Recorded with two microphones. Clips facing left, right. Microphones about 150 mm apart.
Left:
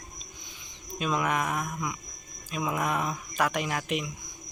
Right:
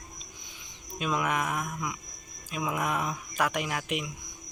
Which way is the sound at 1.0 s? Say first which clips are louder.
Left 1 dB; 10° right (ahead or behind).